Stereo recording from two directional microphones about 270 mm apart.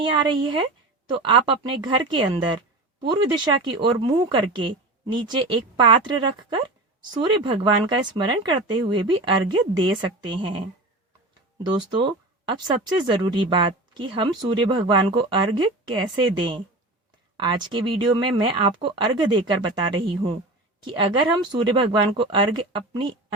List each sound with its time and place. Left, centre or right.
0.0 s a woman's voice: centre
11.6 s speech: centre
22.2 s speech: centre